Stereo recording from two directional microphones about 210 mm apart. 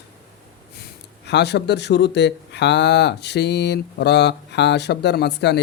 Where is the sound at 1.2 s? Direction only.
55° left (ahead or behind).